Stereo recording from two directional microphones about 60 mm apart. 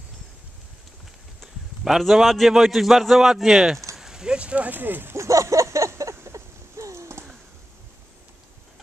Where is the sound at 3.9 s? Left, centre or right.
Centre; by 5.1 s right.